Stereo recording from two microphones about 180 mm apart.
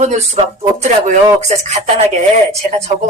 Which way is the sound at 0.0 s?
40° right (ahead or behind).